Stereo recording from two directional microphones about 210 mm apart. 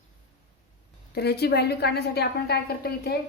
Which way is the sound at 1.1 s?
50° left (ahead or behind).